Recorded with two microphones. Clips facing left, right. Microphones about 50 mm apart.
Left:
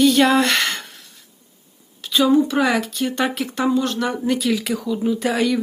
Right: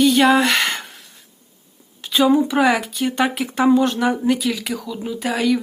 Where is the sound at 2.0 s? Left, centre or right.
Right.